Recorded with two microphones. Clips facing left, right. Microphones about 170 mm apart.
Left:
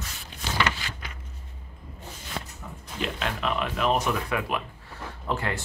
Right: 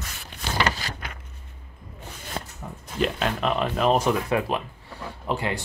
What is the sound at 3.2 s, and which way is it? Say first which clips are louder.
Speech: right 4 dB; 40° right (ahead or behind).